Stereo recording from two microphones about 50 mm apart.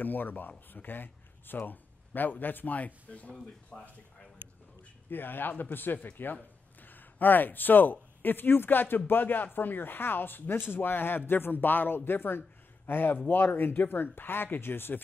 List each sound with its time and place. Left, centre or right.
0.0 s speech: left
5.1 s speech: left